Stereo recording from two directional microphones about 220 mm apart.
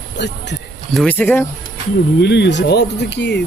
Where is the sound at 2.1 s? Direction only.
50° left (ahead or behind).